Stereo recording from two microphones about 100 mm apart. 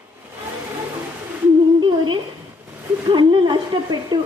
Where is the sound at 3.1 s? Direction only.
50° right (ahead or behind).